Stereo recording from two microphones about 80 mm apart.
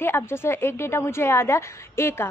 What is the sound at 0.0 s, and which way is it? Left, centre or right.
A woman's voice, left.